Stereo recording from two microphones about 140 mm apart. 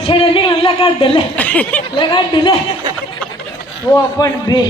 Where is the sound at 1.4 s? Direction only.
10° left (ahead or behind).